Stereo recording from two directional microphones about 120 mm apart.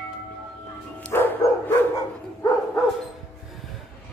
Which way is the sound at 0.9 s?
15° left (ahead or behind).